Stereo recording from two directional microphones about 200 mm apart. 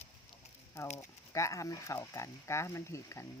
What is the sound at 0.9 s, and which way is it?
Speech, 15° left (ahead or behind).